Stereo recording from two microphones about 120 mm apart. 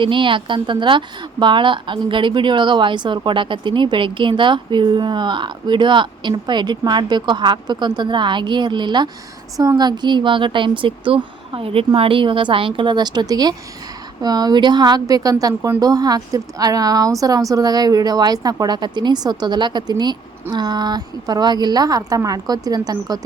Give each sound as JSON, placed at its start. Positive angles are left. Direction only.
{"t": 0.0, "sound": "a woman's voice", "side_deg": -45}